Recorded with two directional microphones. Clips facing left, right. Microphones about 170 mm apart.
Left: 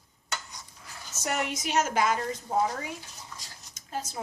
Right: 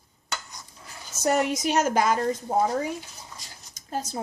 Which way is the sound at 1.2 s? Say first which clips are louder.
Right 8 dB; 35° right (ahead or behind).